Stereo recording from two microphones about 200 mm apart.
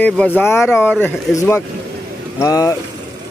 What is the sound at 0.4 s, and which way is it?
Speech, 10° left (ahead or behind).